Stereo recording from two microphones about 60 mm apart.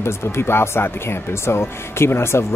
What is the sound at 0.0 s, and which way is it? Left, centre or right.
Speech, left.